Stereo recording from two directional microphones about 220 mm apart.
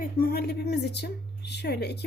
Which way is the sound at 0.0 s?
45° left (ahead or behind).